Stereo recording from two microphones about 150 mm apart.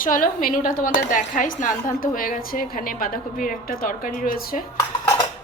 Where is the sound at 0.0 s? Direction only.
65° left (ahead or behind).